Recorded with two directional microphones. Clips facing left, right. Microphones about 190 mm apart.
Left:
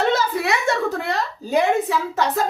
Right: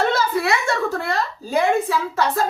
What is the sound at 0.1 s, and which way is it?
A woman's voice, 20° left (ahead or behind).